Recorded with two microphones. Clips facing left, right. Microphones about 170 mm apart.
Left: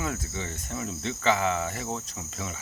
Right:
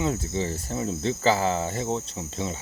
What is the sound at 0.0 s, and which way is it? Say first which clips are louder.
Cricket: right 6 dB; 30° right (ahead or behind).